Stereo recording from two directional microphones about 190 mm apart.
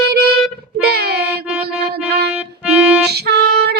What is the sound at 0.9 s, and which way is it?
Child singing, 55° right (ahead or behind).